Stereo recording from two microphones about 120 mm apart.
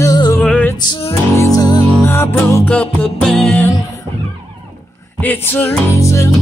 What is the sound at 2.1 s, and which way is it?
Music, 20° left (ahead or behind).